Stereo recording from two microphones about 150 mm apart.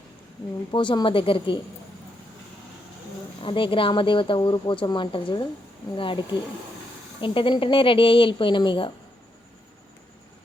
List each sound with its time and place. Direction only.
0.7 s speech: 30° left (ahead or behind)
3.4 s speech: 35° left (ahead or behind)